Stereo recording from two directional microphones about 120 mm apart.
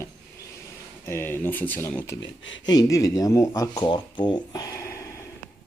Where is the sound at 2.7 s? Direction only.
30° left (ahead or behind).